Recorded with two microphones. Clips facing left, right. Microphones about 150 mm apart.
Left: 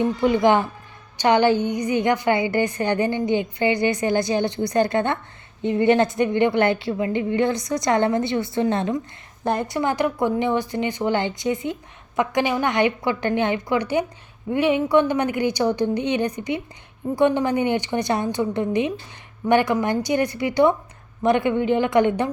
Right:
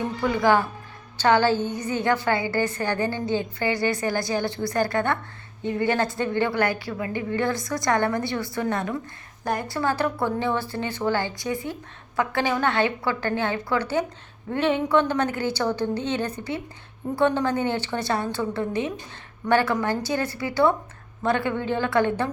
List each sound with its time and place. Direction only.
0.2 s a woman's voice: 20° left (ahead or behind)